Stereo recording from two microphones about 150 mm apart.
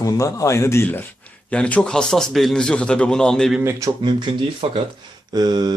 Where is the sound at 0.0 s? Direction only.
20° left (ahead or behind); by 3.6 s 5° left (ahead or behind).